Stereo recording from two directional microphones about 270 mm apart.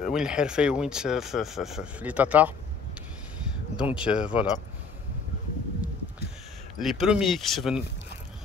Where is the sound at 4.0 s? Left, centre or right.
Centre.